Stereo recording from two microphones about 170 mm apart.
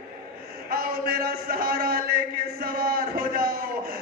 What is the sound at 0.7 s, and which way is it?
A man's voice, 60° right (ahead or behind).